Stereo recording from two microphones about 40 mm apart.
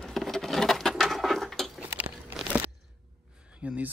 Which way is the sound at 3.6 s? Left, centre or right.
Right.